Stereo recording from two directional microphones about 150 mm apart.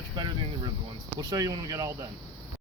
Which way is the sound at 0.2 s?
30° right (ahead or behind).